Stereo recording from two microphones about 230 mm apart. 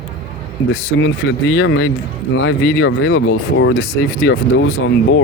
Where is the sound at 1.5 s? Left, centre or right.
Left.